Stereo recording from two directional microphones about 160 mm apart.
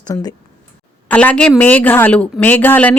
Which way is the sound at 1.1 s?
10° left (ahead or behind).